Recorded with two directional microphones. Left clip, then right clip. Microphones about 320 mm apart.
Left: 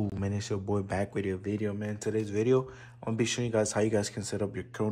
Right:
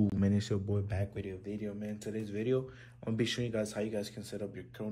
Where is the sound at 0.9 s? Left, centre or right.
Left.